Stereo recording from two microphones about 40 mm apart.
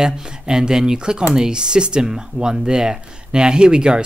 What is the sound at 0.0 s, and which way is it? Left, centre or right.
Speech, centre.